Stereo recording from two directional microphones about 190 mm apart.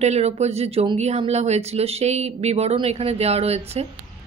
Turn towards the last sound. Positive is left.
turn(degrees=-35)  # may be behind; listen again after turning